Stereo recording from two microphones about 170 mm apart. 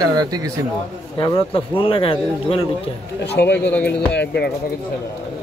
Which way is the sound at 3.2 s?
80° left.